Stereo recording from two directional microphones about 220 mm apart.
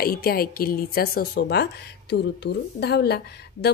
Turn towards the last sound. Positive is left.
turn(degrees=50)  # may be behind; listen again after turning